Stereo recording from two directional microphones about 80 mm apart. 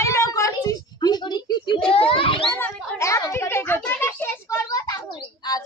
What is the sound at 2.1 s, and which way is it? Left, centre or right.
Children playing, left.